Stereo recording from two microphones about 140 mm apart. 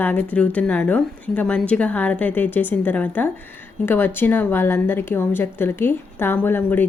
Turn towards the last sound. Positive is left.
turn(degrees=15)  # may be behind; listen again after turning